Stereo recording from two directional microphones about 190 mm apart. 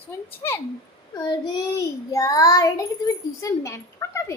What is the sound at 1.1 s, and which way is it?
Child singing, 20° left (ahead or behind).